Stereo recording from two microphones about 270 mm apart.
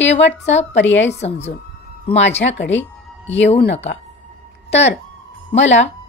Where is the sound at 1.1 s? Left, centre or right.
Left.